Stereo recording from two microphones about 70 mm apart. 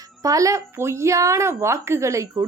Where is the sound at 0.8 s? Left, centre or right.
Right.